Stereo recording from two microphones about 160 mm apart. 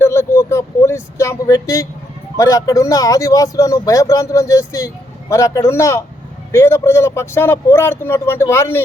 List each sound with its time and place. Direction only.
0.0 s vehicle: 15° left (ahead or behind)
2.3 s a man's voice: 20° left (ahead or behind)